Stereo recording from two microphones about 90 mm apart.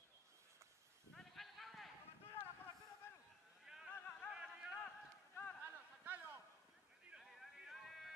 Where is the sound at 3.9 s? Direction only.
20° left (ahead or behind).